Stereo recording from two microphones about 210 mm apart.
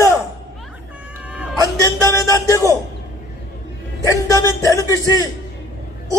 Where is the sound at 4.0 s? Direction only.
15° left (ahead or behind).